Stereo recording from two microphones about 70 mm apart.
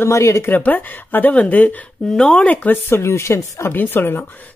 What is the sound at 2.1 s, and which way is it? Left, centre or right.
Speech, centre.